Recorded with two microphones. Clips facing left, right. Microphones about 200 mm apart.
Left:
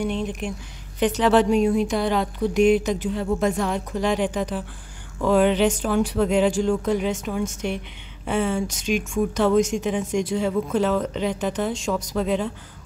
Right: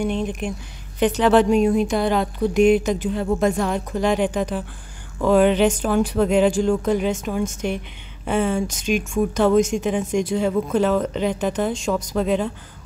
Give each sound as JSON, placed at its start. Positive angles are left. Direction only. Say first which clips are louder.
{"t": 0.0, "sound": "speech", "louder": "right 2 dB", "side_deg": -50}